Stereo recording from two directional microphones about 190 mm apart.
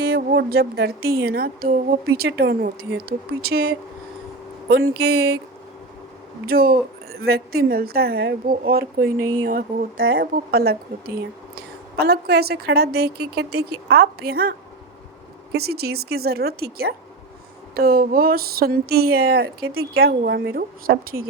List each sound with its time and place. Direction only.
0.0 s speech: 50° right (ahead or behind)
6.4 s a woman's voice: 50° right (ahead or behind)
15.5 s a woman's voice: 55° right (ahead or behind)
19.6 s speech: 90° right
20.0 s a woman's voice: 55° right (ahead or behind)